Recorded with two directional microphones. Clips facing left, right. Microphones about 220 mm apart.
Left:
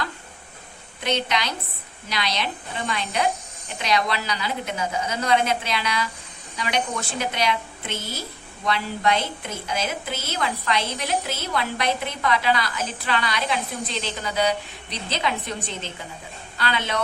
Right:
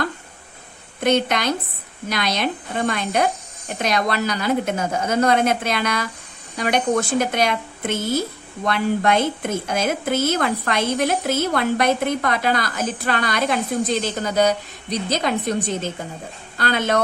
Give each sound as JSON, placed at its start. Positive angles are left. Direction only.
{"t": 1.0, "sound": "a woman's voice", "side_deg": -50}